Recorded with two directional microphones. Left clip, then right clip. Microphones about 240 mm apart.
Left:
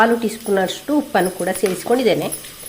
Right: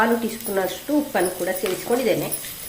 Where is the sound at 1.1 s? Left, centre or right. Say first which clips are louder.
Left 4 dB; left.